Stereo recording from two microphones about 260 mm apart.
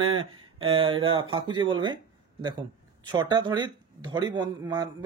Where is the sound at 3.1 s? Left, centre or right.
Centre.